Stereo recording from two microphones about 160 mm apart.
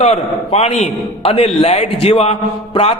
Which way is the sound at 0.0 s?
45° left (ahead or behind).